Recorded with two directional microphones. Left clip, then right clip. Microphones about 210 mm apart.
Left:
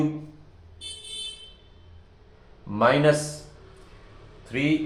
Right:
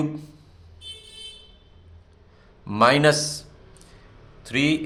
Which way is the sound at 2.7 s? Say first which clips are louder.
Right 2 dB; 35° right (ahead or behind).